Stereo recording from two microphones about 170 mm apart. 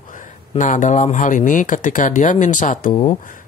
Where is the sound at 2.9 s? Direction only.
30° left (ahead or behind).